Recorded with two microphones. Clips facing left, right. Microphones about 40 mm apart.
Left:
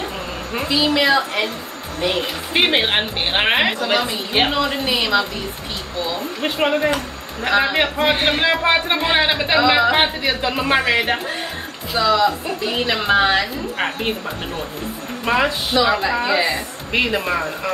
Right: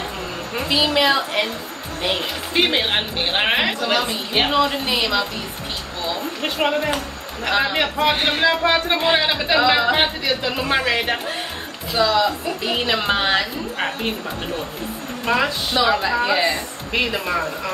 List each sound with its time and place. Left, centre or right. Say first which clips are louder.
0.7 s a woman's voice: left 1 dB; centre
2.5 s a woman's voice: left 2 dB; left; by 5.2 s centre
6.4 s a woman's voice: left 3 dB; centre
16.9 s speech: left 2 dB; centre